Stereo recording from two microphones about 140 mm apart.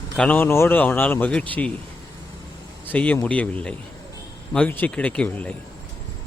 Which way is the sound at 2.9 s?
10° left (ahead or behind).